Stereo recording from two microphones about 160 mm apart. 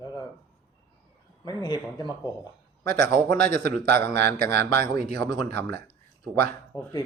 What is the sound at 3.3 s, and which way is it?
Speech, 70° right (ahead or behind).